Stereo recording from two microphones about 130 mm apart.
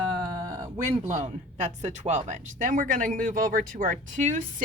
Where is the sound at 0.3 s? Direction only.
30° right (ahead or behind).